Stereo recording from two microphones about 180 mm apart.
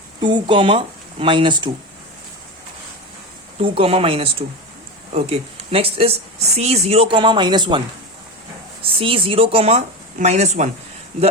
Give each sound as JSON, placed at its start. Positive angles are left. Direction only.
{"t": 0.2, "sound": "speech", "side_deg": -25}
{"t": 3.6, "sound": "speech", "side_deg": -30}
{"t": 8.8, "sound": "speech", "side_deg": -30}